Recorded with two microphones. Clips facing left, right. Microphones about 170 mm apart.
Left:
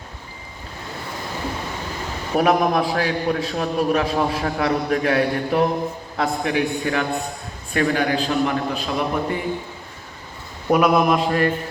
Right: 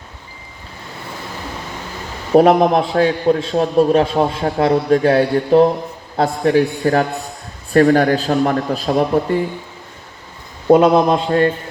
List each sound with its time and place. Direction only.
2.3 s a man's voice: 30° right (ahead or behind)
10.7 s a man's voice: 30° right (ahead or behind)